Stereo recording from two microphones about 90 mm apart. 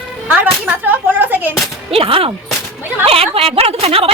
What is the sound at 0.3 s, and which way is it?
Speech, 15° right (ahead or behind).